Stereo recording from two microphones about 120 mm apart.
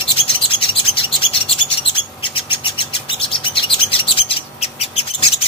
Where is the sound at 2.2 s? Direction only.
45° left (ahead or behind).